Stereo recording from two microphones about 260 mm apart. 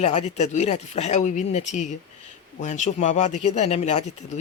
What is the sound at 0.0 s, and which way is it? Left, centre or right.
Speech, left.